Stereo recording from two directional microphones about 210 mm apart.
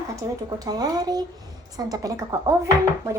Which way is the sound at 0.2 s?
15° right (ahead or behind).